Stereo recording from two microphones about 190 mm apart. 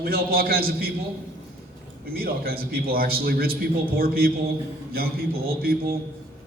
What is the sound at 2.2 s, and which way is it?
A man's voice, 50° right (ahead or behind).